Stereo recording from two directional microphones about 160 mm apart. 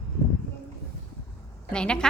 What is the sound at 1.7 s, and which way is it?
Speech, 5° left (ahead or behind).